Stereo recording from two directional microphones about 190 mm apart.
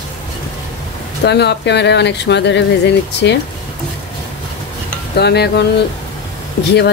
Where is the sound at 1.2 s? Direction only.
65° left (ahead or behind).